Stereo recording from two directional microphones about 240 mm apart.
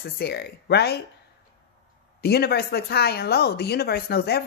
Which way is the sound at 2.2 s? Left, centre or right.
Left.